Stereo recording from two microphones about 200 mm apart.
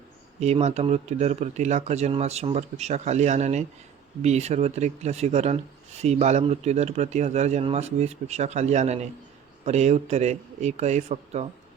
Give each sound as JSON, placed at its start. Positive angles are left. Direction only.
{"t": 0.3, "sound": "speech", "side_deg": -35}